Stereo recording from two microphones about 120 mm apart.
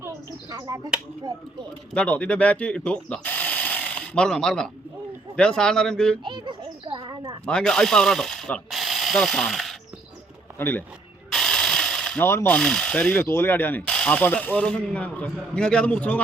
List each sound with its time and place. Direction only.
1.9 s speech: 10° left (ahead or behind)
6.2 s children playing: 40° right (ahead or behind)
7.4 s speech: 5° left (ahead or behind)
10.6 s speech: 15° left (ahead or behind)
11.3 s mechanisms: 5° left (ahead or behind)
12.2 s pulleys: 20° left (ahead or behind)
12.5 s speech: 5° left (ahead or behind)